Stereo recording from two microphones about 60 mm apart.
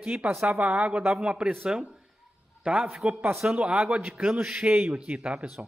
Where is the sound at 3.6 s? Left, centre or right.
Centre.